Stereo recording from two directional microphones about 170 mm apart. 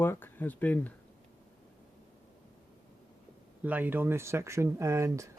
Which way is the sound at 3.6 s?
10° right (ahead or behind).